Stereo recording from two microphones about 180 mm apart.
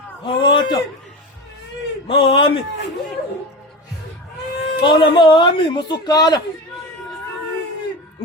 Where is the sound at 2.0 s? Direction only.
30° left (ahead or behind).